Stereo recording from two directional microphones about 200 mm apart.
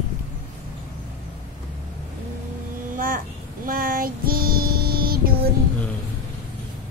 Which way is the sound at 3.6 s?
45° right (ahead or behind).